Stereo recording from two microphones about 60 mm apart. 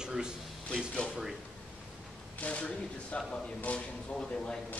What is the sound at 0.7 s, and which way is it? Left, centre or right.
Speech, centre.